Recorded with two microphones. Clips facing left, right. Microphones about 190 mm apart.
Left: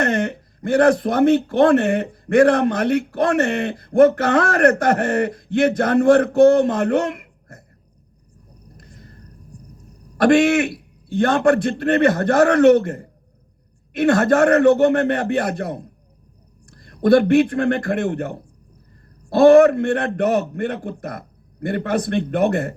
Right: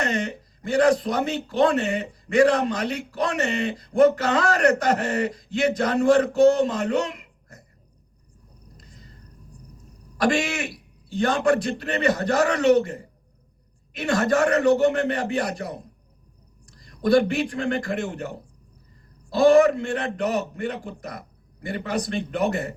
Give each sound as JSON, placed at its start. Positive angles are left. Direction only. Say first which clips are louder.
{"t": 0.0, "sound": "speech", "louder": "left 6 dB", "side_deg": 55}
{"t": 8.8, "sound": "a sound", "louder": "left 5 dB", "side_deg": 55}
{"t": 10.2, "sound": "a man's voice", "louder": "left 9 dB", "side_deg": 55}